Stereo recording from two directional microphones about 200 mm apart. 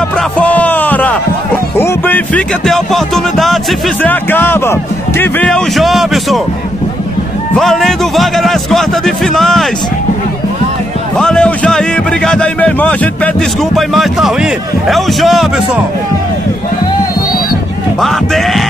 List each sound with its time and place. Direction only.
0.4 s music: 5° left (ahead or behind)
1.8 s speech: 10° left (ahead or behind)
7.5 s speech: centre (ahead or behind)
11.1 s speech: 5° left (ahead or behind)
18.0 s speech: centre (ahead or behind)